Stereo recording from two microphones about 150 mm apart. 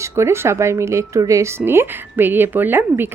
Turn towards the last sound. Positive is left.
turn(degrees=-15)  # may be behind; listen again after turning